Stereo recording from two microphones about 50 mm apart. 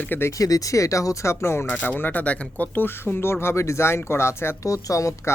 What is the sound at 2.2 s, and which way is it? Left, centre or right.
Speech, left.